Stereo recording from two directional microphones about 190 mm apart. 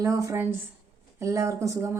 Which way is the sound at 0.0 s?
15° right (ahead or behind).